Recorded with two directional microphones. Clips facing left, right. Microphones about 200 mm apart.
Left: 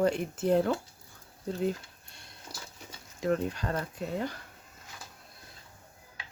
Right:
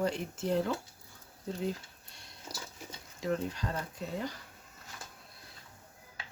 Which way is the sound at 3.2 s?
55° left (ahead or behind).